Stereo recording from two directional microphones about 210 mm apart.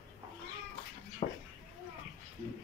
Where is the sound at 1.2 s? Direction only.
30° left (ahead or behind).